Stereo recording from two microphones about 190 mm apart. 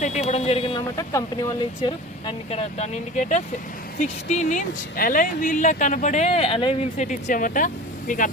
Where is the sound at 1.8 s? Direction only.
30° left (ahead or behind).